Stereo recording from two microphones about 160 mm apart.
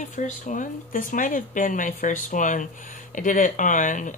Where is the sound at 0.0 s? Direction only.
50° left (ahead or behind).